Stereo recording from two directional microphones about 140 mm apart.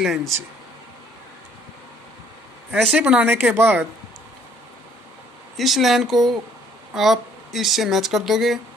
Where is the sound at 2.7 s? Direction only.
10° right (ahead or behind).